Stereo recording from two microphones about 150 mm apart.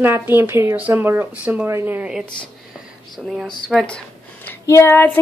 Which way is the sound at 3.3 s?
Centre (ahead or behind).